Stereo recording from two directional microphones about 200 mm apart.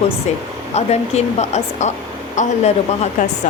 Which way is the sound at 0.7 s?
35° left (ahead or behind).